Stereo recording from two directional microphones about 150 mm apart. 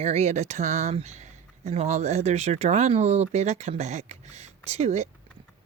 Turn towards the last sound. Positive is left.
turn(degrees=-45)  # may be behind; listen again after turning